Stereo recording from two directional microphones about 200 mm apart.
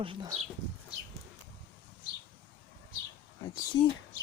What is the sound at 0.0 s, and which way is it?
Speech, 25° right (ahead or behind).